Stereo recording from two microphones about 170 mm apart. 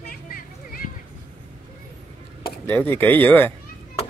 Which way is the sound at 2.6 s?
10° left (ahead or behind).